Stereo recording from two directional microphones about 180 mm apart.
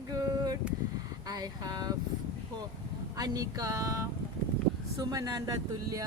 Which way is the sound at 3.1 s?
20° right (ahead or behind).